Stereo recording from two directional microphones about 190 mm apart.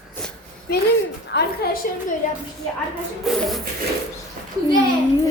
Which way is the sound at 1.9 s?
50° left (ahead or behind).